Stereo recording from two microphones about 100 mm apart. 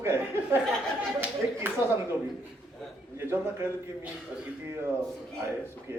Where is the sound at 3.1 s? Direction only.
25° right (ahead or behind).